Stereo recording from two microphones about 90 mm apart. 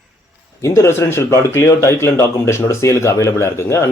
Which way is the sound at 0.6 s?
35° left (ahead or behind).